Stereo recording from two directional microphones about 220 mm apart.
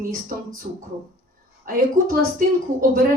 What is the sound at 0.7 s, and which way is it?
Speech, 40° right (ahead or behind).